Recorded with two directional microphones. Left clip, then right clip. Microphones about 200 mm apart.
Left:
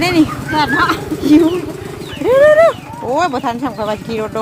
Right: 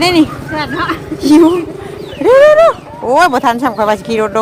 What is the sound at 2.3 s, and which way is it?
Speech, 5° right (ahead or behind).